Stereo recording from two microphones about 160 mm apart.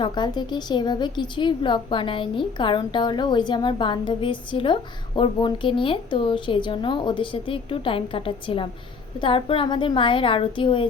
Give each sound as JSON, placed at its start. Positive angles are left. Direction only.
{"t": 0.0, "sound": "a woman's voice", "side_deg": 30}